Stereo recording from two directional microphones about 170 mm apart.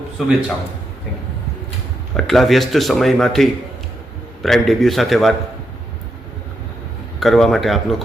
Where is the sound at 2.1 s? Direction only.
Centre (ahead or behind).